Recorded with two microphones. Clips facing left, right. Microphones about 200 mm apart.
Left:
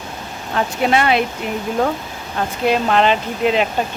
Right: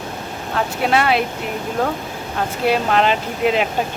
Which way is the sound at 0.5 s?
Centre (ahead or behind).